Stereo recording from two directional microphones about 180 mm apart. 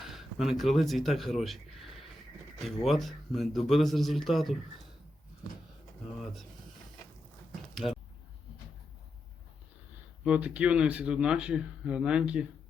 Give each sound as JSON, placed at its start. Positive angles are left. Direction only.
{"t": 0.0, "sound": "speech", "side_deg": 0}
{"t": 10.2, "sound": "speech", "side_deg": -5}